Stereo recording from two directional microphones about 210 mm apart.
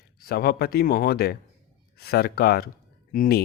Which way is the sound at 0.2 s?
45° left (ahead or behind).